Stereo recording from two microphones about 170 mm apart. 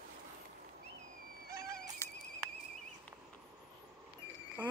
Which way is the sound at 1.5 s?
20° right (ahead or behind).